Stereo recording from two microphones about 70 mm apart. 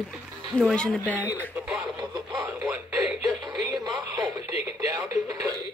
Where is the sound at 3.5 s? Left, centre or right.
Right.